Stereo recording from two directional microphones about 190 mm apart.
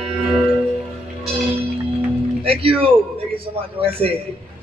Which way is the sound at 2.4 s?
30° right (ahead or behind).